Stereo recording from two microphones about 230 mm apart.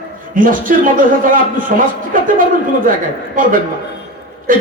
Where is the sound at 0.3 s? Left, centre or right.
Right.